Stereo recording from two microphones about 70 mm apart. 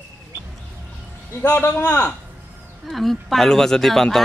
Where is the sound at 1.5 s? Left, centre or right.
Left.